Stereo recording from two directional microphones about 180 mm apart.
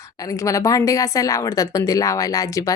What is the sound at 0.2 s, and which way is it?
A woman's voice, 20° left (ahead or behind).